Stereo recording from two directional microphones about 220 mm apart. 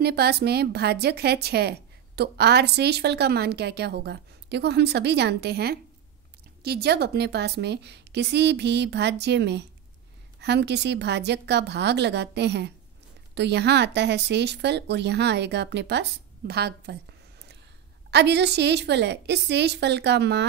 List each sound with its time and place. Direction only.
0.0 s a woman's voice: 45° right (ahead or behind)
18.1 s a woman's voice: 50° right (ahead or behind)